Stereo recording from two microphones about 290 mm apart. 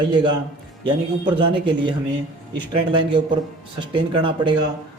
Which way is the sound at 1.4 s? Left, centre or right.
Centre.